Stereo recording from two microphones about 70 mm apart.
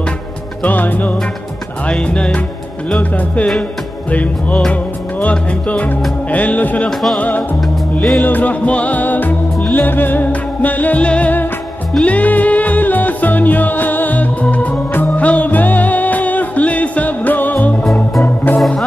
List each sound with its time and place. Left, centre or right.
0.7 s music: left
4.1 s music: left